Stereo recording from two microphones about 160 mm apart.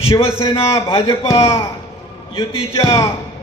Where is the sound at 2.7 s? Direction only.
20° left (ahead or behind).